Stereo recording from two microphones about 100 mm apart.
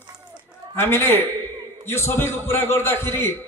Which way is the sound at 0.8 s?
25° left (ahead or behind).